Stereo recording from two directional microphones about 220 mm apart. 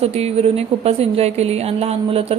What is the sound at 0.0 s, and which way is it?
A woman's voice, 30° right (ahead or behind).